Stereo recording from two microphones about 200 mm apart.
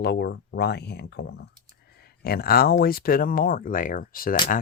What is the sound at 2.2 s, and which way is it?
Speech, 50° left (ahead or behind).